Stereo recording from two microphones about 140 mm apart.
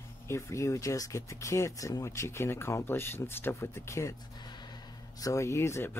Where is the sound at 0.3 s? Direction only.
20° left (ahead or behind).